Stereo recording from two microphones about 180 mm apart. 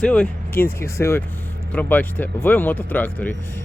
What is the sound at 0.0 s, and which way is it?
Speech, 5° left (ahead or behind).